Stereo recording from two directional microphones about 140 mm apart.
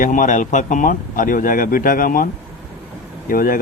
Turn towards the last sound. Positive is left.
turn(degrees=90)